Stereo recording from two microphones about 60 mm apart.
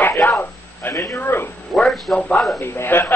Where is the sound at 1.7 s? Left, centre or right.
Centre.